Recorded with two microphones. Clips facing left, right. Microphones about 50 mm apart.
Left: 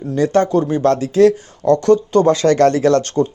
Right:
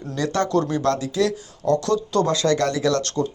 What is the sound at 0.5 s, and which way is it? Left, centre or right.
Speech, centre.